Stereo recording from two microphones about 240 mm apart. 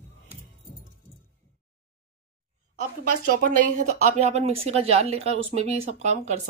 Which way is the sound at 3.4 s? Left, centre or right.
Right.